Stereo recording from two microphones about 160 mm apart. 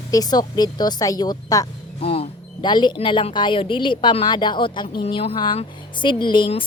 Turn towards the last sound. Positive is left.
turn(degrees=30)  # may be behind; listen again after turning